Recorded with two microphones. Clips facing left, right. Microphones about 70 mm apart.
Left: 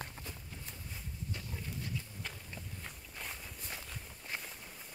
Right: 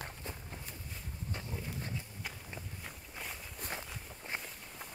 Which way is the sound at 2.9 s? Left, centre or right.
Centre.